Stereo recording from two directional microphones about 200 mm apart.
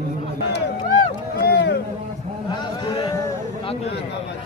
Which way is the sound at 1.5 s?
55° left (ahead or behind).